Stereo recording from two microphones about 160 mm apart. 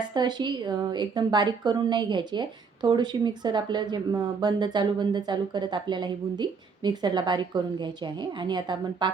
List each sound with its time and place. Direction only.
0.1 s a woman's voice: 25° right (ahead or behind)